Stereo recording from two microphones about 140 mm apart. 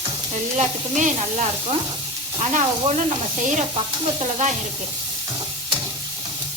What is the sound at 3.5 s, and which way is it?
Sizzle, 60° right (ahead or behind).